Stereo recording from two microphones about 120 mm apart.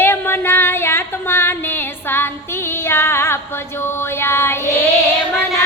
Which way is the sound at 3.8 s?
20° left (ahead or behind).